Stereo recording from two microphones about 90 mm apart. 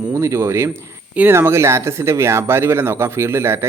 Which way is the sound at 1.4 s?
30° right (ahead or behind).